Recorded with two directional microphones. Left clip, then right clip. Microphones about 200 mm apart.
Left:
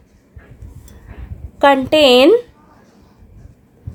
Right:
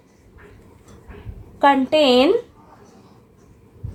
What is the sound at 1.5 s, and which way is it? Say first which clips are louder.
Speech: left 4 dB; 50° left (ahead or behind).